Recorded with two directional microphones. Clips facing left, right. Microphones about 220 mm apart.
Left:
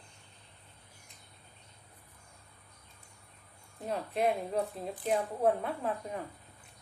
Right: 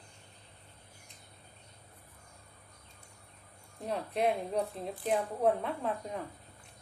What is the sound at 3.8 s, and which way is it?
A woman's voice, centre (ahead or behind).